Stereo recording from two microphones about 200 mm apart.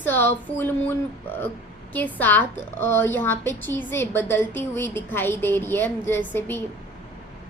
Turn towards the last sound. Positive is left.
turn(degrees=10)  # may be behind; listen again after turning